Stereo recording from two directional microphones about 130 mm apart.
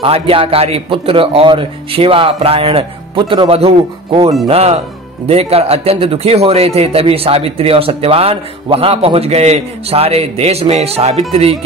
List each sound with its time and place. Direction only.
0.0 s speech: 45° right (ahead or behind)